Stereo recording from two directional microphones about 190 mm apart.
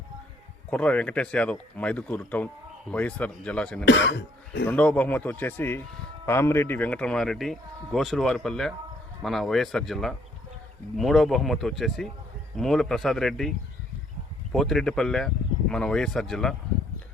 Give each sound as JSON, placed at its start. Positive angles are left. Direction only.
{"t": 0.7, "sound": "speech", "side_deg": 5}
{"t": 3.8, "sound": "speech", "side_deg": 65}
{"t": 4.6, "sound": "speech", "side_deg": 5}
{"t": 14.5, "sound": "speech", "side_deg": 0}